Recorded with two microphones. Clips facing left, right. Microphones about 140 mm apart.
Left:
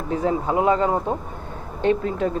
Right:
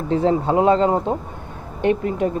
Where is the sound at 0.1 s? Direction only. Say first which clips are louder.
Right 4 dB; 30° right (ahead or behind).